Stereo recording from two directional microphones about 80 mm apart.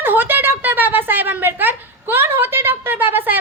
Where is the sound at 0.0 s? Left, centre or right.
Right.